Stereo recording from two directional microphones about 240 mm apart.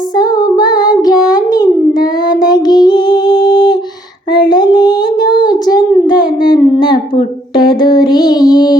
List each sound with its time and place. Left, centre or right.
0.2 s music: centre
2.0 s female singing: centre
4.3 s a sound: centre
7.9 s child singing: centre